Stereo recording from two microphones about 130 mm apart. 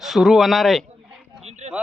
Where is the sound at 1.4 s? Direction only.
55° right (ahead or behind).